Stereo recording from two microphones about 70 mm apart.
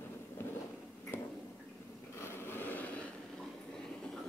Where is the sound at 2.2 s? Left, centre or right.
Left.